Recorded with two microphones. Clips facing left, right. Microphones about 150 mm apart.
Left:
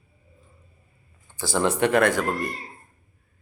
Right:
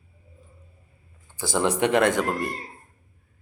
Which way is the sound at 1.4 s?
15° right (ahead or behind).